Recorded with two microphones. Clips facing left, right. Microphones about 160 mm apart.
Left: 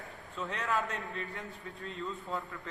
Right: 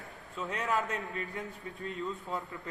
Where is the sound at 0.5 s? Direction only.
20° right (ahead or behind).